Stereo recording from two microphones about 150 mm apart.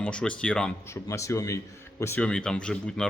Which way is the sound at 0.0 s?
5° left (ahead or behind).